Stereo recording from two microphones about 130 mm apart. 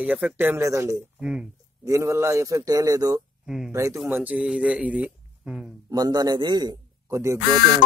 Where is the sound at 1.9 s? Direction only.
25° right (ahead or behind).